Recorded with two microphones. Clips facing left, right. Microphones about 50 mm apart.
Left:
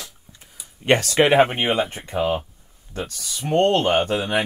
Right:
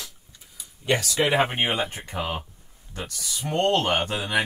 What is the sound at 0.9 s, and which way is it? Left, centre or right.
Speech, left.